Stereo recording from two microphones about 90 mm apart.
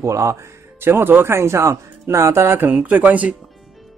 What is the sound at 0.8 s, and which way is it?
A man's voice, 25° right (ahead or behind).